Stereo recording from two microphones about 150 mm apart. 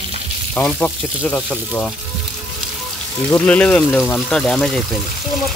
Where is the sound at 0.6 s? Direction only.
10° left (ahead or behind).